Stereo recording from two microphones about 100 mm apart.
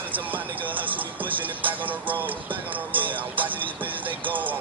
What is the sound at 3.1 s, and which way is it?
Music, 15° right (ahead or behind).